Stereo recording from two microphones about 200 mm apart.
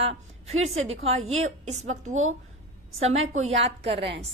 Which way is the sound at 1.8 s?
35° right (ahead or behind).